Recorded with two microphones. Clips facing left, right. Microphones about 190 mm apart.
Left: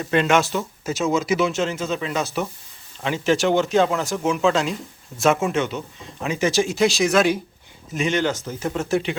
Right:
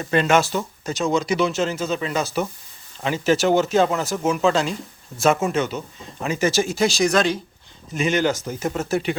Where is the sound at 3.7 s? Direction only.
40° right (ahead or behind).